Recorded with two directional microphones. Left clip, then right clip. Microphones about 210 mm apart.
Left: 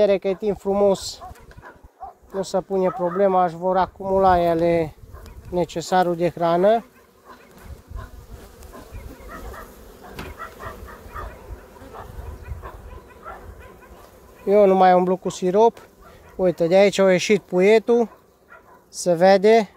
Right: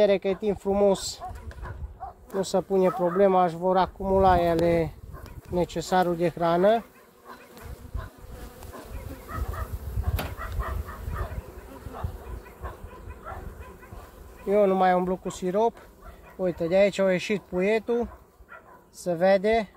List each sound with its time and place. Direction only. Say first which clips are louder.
0.0 s speech: left 4 dB; 40° left (ahead or behind)
2.0 s bow-wow: left 2 dB; 5° left (ahead or behind)
2.4 s speech: left 2 dB; 20° left (ahead or behind)
4.2 s speech: left 4 dB; 45° left (ahead or behind)
10.4 s dog: left 1 dB; 50° left (ahead or behind)
13.3 s bow-wow: left 2 dB; 50° left (ahead or behind)
14.4 s speech: left 7 dB; 45° left (ahead or behind)
16.3 s speech: left 6 dB; 55° left (ahead or behind)